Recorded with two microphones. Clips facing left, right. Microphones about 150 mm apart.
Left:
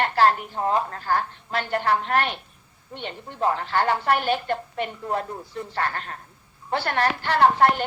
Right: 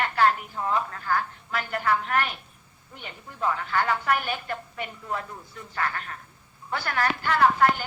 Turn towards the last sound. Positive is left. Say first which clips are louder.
# left 3 dB
turn(degrees=30)  # may be behind; listen again after turning